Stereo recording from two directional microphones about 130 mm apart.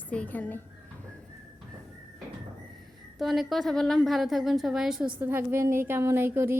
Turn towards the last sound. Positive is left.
turn(degrees=-15)  # may be behind; listen again after turning